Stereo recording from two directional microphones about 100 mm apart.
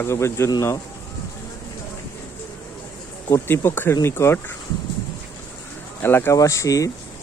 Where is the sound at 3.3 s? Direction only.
20° left (ahead or behind).